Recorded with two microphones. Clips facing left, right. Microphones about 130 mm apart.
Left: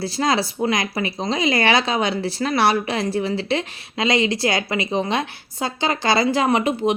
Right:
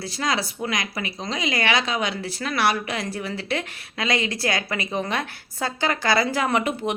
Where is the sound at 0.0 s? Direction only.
30° left (ahead or behind).